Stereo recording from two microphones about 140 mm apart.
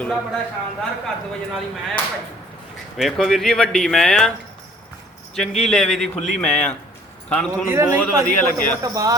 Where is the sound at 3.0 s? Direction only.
Centre (ahead or behind).